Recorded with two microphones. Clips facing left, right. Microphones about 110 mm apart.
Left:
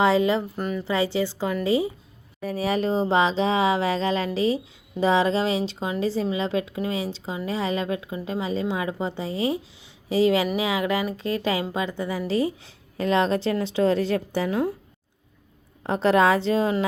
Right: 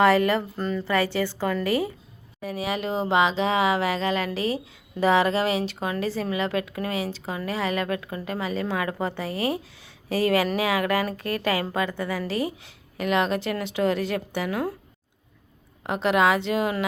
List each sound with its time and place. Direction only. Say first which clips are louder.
0.0 s a woman's voice: right 1 dB; 20° left (ahead or behind)
2.4 s a woman's voice: left 4 dB; 35° left (ahead or behind)
15.9 s a woman's voice: left 2 dB; 35° left (ahead or behind)